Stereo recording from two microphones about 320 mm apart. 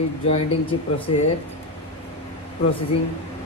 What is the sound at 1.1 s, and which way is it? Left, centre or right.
Speech, centre.